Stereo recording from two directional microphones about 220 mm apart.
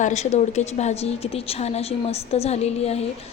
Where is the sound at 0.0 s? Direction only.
30° left (ahead or behind).